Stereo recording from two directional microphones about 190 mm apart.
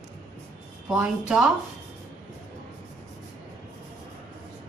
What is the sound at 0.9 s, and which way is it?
Speech, 5° right (ahead or behind).